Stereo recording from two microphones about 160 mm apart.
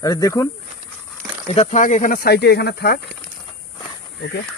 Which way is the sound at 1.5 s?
45° left (ahead or behind).